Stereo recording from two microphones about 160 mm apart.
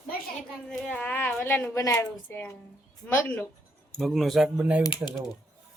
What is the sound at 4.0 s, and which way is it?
Speech, centre (ahead or behind).